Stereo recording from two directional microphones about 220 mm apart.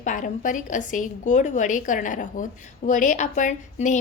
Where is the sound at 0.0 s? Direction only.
35° left (ahead or behind).